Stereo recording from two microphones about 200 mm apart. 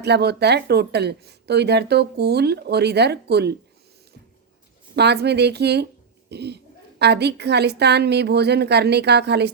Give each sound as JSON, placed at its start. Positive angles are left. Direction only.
{"t": 0.0, "sound": "speech", "side_deg": -55}
{"t": 4.9, "sound": "speech", "side_deg": -55}